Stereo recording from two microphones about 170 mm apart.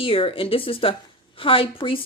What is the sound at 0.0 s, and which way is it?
Speech, 35° left (ahead or behind).